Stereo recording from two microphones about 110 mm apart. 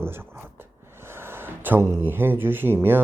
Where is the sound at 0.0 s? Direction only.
20° right (ahead or behind).